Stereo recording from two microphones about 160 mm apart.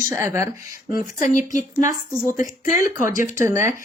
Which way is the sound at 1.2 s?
50° left (ahead or behind).